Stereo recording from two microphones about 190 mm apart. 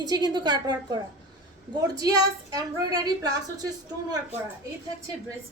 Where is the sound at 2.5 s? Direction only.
20° right (ahead or behind).